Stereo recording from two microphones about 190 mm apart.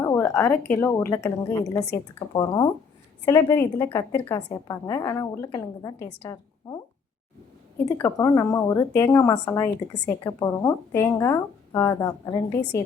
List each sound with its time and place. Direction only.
0.0 s a woman's voice: 15° left (ahead or behind)
7.9 s a woman's voice: 15° left (ahead or behind)